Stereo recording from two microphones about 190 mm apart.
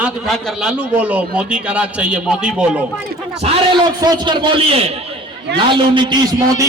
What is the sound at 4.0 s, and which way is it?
A man's voice, 20° right (ahead or behind).